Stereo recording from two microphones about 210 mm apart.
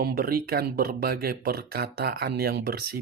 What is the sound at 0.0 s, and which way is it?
Speech, 45° right (ahead or behind).